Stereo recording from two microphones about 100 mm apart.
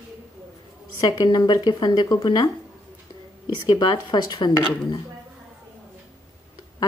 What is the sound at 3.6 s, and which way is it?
Speech, 40° left (ahead or behind).